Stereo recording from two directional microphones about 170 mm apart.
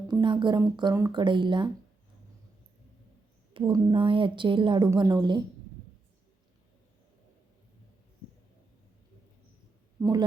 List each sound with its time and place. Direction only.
0.1 s a woman's voice: 30° right (ahead or behind)
3.5 s a woman's voice: 25° right (ahead or behind)
4.9 s a woman's voice: 15° right (ahead or behind)
10.0 s a woman's voice: 20° right (ahead or behind)